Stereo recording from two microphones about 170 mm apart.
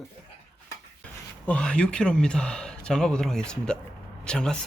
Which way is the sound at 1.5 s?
5° left (ahead or behind).